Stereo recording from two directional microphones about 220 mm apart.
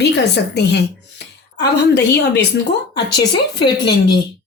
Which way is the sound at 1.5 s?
50° left (ahead or behind).